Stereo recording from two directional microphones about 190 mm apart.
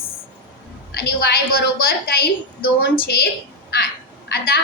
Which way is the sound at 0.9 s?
55° left (ahead or behind).